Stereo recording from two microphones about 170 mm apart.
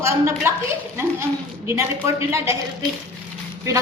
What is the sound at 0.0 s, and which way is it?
Speech, 15° right (ahead or behind).